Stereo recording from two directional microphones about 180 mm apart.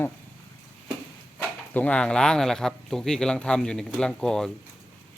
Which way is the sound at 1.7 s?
5° left (ahead or behind).